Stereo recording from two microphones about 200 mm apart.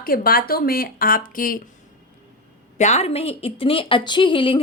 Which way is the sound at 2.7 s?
35° left (ahead or behind).